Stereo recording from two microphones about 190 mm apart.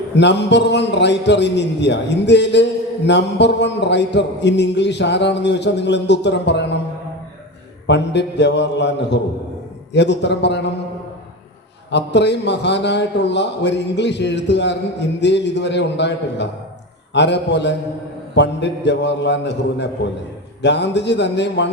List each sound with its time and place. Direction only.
0.2 s a man's voice: 65° left (ahead or behind)
7.9 s a man's voice: 65° left (ahead or behind)
11.9 s a man's voice: 65° left (ahead or behind)